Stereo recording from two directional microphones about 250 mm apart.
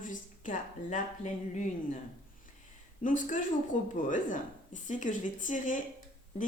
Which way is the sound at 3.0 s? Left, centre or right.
Left.